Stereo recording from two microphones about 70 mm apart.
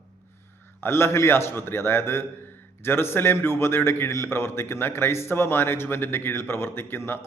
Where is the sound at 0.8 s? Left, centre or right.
Left.